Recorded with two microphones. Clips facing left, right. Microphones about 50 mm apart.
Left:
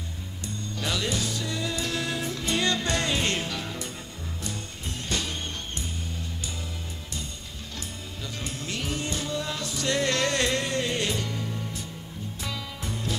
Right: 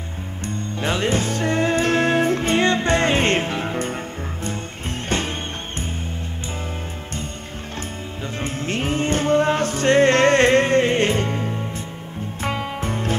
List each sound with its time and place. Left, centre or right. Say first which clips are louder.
0.5 s music: right 7 dB; right
8.4 s music: right 9 dB; right